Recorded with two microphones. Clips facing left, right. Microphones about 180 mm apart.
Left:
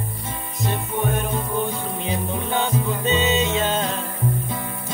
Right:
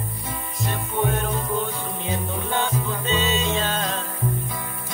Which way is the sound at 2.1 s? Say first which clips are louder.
Left 2 dB; 15° left (ahead or behind).